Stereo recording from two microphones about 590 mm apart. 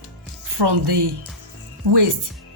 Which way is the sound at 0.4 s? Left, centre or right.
Right.